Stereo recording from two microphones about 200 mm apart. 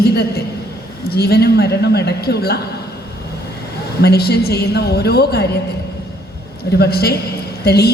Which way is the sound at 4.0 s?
55° left (ahead or behind).